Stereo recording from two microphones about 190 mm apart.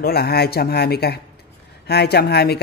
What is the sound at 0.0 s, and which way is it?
Speech, 55° left (ahead or behind).